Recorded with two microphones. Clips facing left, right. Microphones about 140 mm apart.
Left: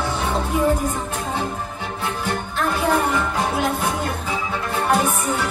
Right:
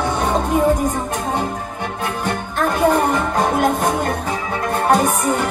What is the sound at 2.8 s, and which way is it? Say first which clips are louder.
Music: right 5 dB; 50° right (ahead or behind).